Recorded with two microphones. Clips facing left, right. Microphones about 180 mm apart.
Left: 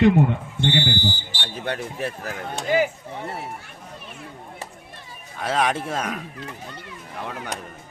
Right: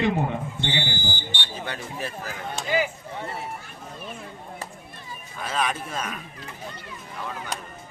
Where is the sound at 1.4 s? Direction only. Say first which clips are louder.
Left 9 dB; 60° left (ahead or behind).